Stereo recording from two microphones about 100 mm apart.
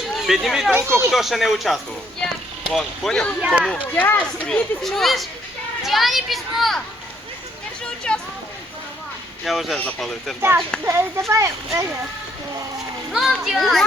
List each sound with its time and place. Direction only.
0.2 s speech: 5° right (ahead or behind)
0.7 s a child's voice: 25° right (ahead or behind)
1.1 s a child's voice: centre (ahead or behind)
3.4 s speech: 10° right (ahead or behind)
3.7 s speech: 15° left (ahead or behind)
4.8 s a child's voice: 5° left (ahead or behind)
8.1 s a sound: 10° left (ahead or behind)
9.4 s a child's voice: centre (ahead or behind)
10.8 s a child's voice: 25° right (ahead or behind)
13.1 s a child's voice: centre (ahead or behind)